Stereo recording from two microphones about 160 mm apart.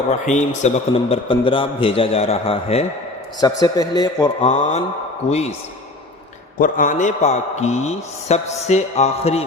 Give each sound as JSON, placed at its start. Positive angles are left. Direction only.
{"t": 0.1, "sound": "a man's voice", "side_deg": 45}
{"t": 3.4, "sound": "a man's voice", "side_deg": 25}
{"t": 4.4, "sound": "a man's voice", "side_deg": 45}
{"t": 6.6, "sound": "a man's voice", "side_deg": 55}